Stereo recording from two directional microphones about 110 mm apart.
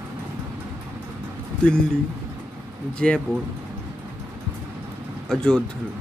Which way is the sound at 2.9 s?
5° left (ahead or behind).